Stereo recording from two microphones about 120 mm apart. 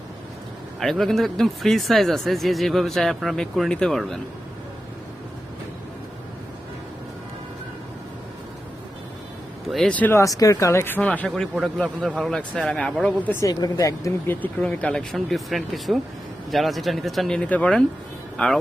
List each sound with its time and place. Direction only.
0.8 s speech: centre (ahead or behind)
9.6 s speech: centre (ahead or behind)
9.9 s speech: 15° left (ahead or behind)
10.2 s speech: 30° left (ahead or behind); by 13.3 s 10° left (ahead or behind)
13.3 s speech: 30° left (ahead or behind)
14.4 s speech: 10° left (ahead or behind)